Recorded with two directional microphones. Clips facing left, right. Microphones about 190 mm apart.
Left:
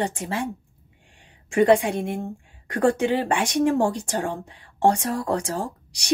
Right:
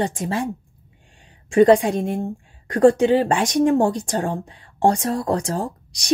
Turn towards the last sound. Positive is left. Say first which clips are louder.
# right 3 dB
turn(degrees=-35)  # may be behind; listen again after turning